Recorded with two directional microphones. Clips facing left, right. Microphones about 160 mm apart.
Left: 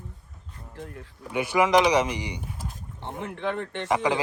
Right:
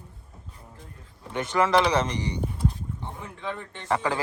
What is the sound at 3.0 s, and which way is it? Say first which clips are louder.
Speech: left 7 dB; 70° left (ahead or behind).